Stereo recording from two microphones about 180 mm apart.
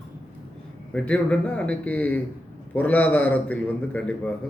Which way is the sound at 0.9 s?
5° left (ahead or behind).